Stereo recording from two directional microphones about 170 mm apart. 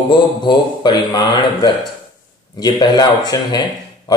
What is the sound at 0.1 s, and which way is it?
A man's voice, 25° left (ahead or behind).